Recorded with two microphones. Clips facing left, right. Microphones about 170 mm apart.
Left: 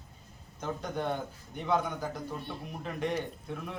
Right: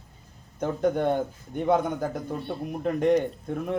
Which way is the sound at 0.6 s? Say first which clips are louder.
Right 10 dB; 55° right (ahead or behind).